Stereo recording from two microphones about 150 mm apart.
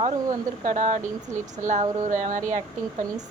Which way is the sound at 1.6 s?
55° right (ahead or behind).